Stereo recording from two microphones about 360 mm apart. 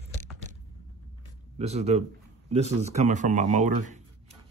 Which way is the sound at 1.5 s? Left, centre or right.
Centre.